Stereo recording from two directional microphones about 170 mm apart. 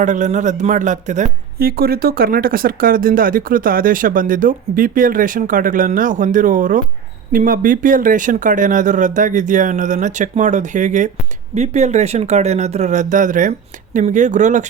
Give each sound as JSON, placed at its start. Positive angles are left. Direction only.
{"t": 0.0, "sound": "speech", "side_deg": -45}